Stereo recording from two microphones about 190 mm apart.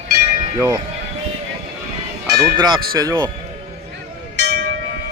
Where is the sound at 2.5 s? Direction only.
25° right (ahead or behind).